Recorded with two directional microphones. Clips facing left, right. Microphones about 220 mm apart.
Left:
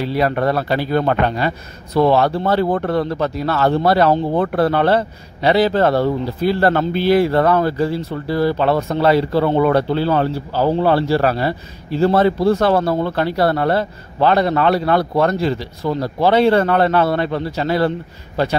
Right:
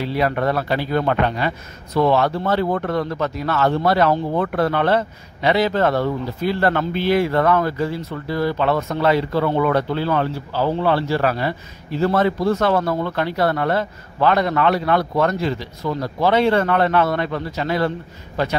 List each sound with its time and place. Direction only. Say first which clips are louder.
0.0 s speech: left 3 dB; 35° left (ahead or behind)